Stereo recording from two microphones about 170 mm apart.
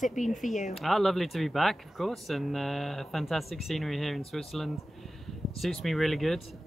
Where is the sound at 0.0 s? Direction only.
45° left (ahead or behind).